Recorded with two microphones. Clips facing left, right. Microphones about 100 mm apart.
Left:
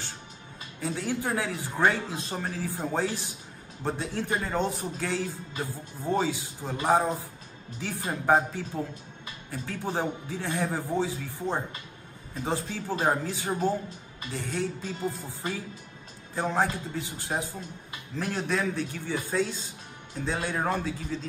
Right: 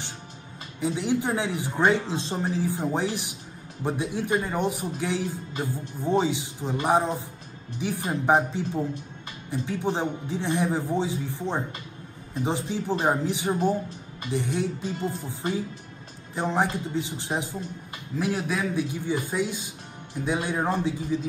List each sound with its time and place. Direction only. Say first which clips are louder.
0.7 s speech: right 5 dB; 20° right (ahead or behind)
18.1 s speech: right 2 dB; 5° right (ahead or behind)